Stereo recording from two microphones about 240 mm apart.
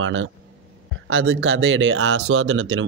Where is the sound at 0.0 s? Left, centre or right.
Right.